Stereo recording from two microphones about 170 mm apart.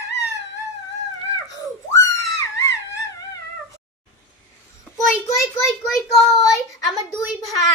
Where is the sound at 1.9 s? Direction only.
20° left (ahead or behind).